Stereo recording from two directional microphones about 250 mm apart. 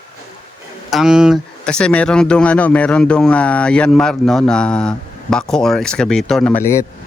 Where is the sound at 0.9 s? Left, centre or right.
Centre.